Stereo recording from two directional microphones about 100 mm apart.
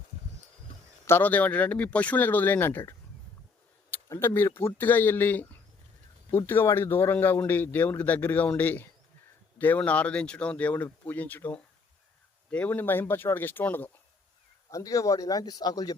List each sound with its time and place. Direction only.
1.0 s speech: 20° left (ahead or behind)
3.9 s a sound: 25° left (ahead or behind)
4.4 s a man's voice: 25° left (ahead or behind)
14.7 s speech: 35° left (ahead or behind)